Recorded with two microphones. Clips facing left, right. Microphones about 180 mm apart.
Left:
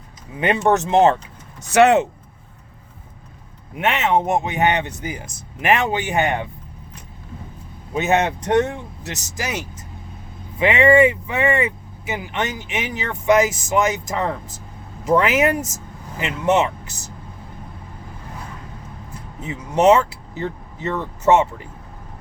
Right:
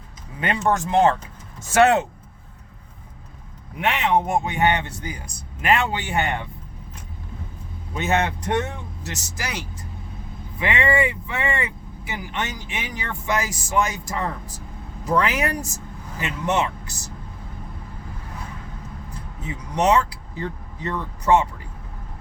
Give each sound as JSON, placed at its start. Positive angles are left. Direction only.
{"t": 0.3, "sound": "speech", "side_deg": 20}
{"t": 4.0, "sound": "speech", "side_deg": 20}
{"t": 7.9, "sound": "speech", "side_deg": 20}
{"t": 19.4, "sound": "speech", "side_deg": 20}